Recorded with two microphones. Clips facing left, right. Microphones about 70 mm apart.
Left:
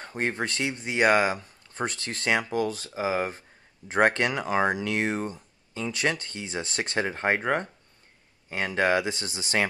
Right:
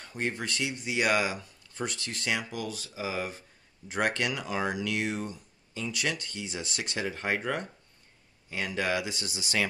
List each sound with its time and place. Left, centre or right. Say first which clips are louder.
0.0 s speech: left 4 dB; left